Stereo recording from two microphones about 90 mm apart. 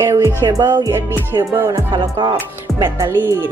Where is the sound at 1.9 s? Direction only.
55° right (ahead or behind).